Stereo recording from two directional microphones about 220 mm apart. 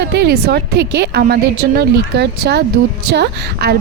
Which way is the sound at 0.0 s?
50° right (ahead or behind).